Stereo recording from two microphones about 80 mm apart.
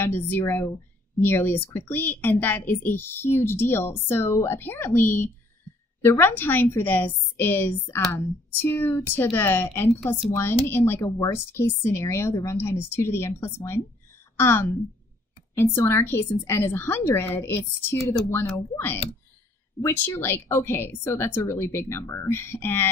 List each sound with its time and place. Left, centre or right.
0.0 s a woman's voice: left
19.8 s a woman's voice: left